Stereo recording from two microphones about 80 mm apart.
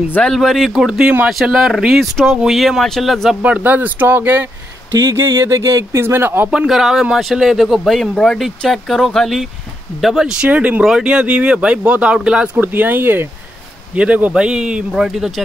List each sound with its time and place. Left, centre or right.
0.3 s speech: centre
3.4 s speech: centre
5.1 s speech: right
6.5 s speech: centre
10.8 s speech: centre; by 13.3 s right
13.9 s speech: centre